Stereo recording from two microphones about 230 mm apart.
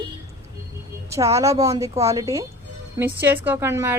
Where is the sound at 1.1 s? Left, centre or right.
Centre.